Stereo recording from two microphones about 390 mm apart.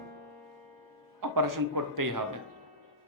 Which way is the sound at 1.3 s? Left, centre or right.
Right.